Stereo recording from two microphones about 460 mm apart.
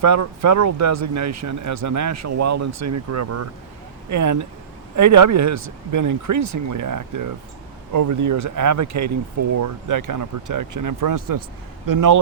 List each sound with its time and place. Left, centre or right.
0.0 s speech: right